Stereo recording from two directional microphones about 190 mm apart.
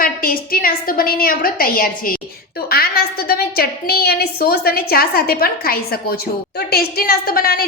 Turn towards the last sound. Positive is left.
turn(degrees=50)  # may be behind; listen again after turning